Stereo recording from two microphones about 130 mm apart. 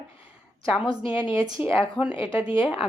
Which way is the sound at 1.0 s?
40° left (ahead or behind).